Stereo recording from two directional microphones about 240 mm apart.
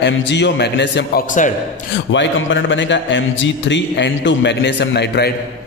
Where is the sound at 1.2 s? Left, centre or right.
Left.